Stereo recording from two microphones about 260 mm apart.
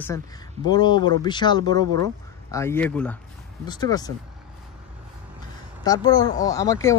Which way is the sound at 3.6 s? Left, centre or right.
Centre.